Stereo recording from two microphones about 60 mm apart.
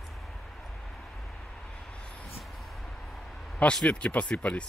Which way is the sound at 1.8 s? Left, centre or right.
Centre.